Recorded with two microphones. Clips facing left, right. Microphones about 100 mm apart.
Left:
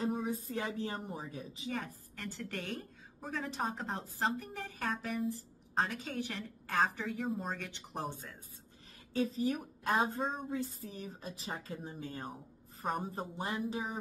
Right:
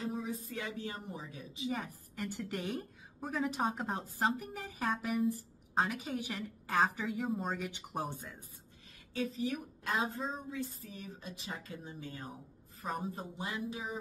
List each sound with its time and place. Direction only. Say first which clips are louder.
0.0 s a sound: left 4 dB; 45° left (ahead or behind)
0.5 s speech: left 3 dB; 35° left (ahead or behind)
1.7 s a woman's voice: right 1 dB; 10° right (ahead or behind)
9.1 s speech: left 3 dB; 40° left (ahead or behind)